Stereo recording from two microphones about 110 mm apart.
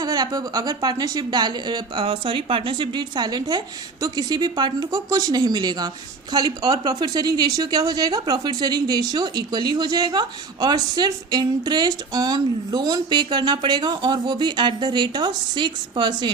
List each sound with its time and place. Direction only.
0.0 s speech: 40° right (ahead or behind)